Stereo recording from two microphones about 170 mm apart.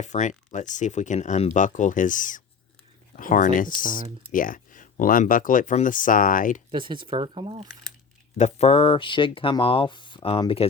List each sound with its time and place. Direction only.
0.0 s speech: 45° left (ahead or behind)
6.7 s speech: 30° right (ahead or behind)
8.4 s speech: 40° left (ahead or behind)